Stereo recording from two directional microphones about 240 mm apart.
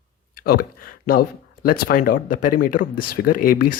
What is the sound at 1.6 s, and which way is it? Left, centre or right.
Speech, left.